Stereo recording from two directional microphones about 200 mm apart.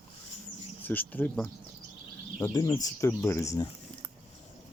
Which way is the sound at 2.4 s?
20° left (ahead or behind).